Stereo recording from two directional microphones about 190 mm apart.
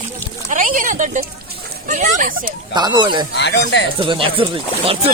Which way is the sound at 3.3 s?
65° left (ahead or behind).